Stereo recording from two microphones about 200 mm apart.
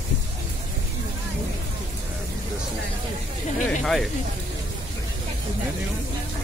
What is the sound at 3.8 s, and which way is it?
Speech, centre (ahead or behind).